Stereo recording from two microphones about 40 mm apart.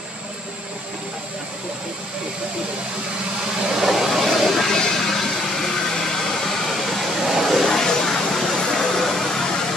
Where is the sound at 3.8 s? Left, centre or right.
Centre.